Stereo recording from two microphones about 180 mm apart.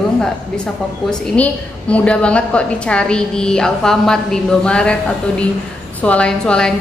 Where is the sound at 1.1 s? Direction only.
5° left (ahead or behind).